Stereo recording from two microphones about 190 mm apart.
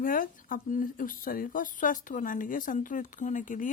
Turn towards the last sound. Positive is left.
turn(degrees=45)  # may be behind; listen again after turning